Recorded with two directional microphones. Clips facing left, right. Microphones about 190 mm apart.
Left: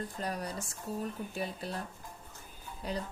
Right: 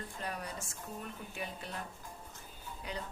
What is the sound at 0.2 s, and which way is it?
A woman's voice, 35° left (ahead or behind).